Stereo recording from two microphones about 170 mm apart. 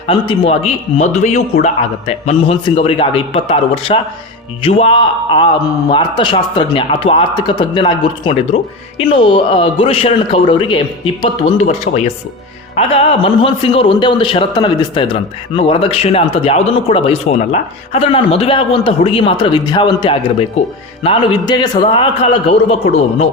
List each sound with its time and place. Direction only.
0.1 s a man's voice: 35° left (ahead or behind)